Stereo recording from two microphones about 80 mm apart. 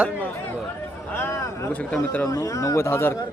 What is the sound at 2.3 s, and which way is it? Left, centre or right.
Speech, left.